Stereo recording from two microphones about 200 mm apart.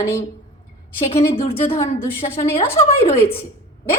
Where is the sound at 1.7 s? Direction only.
15° left (ahead or behind).